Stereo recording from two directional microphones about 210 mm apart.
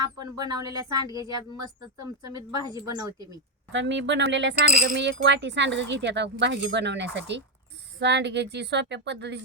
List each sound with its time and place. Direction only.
0.0 s speech: 20° right (ahead or behind)
3.7 s speech: 60° right (ahead or behind)